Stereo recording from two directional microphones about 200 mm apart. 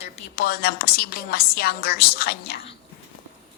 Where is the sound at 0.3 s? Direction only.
50° left (ahead or behind).